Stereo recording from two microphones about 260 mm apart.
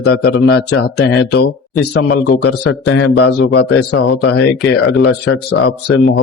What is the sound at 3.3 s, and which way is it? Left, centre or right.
Speech, left.